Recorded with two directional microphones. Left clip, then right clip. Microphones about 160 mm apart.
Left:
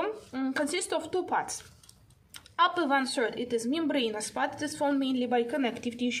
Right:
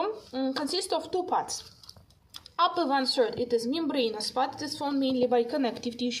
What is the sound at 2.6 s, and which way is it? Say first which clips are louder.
A woman's voice: even; 10° left (ahead or behind).